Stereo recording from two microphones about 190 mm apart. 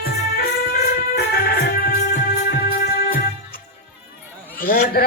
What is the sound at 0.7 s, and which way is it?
Music, 55° left (ahead or behind).